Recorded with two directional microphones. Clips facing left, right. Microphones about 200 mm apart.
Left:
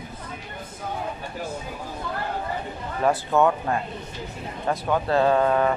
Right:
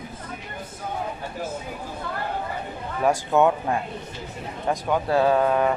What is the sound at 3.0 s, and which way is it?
Speech, 15° right (ahead or behind).